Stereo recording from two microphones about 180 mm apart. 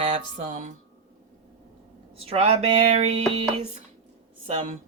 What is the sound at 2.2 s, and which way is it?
Speech, 30° right (ahead or behind).